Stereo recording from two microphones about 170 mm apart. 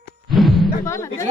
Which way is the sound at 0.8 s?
15° left (ahead or behind).